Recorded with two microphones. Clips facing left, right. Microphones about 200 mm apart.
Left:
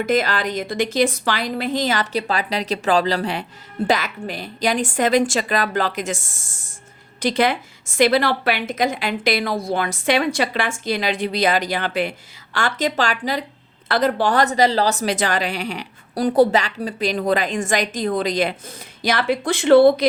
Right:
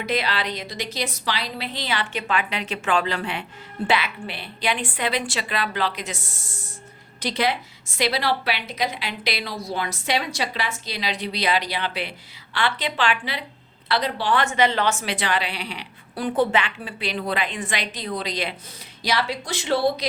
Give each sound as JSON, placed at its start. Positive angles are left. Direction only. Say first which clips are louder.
{"t": 0.0, "sound": "a woman's voice", "louder": "left 6 dB", "side_deg": 45}